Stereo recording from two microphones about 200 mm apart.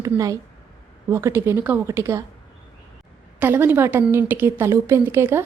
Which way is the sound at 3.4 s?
10° right (ahead or behind).